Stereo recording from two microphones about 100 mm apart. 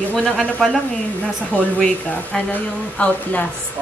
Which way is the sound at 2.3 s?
15° left (ahead or behind).